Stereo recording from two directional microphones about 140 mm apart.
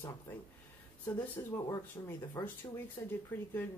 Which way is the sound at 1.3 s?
20° left (ahead or behind).